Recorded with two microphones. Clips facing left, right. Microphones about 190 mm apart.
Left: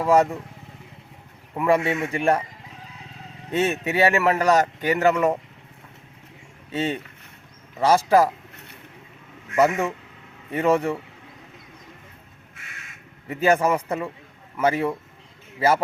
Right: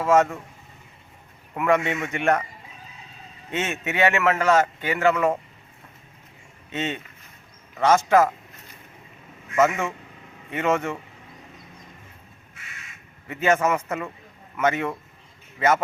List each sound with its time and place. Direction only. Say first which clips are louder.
0.1 s speech: even; 35° left (ahead or behind)
1.5 s speech: left 1 dB; 30° left (ahead or behind)
3.5 s speech: left 5 dB; 35° left (ahead or behind)
6.7 s speech: left 3 dB; 35° left (ahead or behind)
9.6 s speech: left 1 dB; 35° left (ahead or behind)
13.2 s a man's voice: left 2 dB; 35° left (ahead or behind)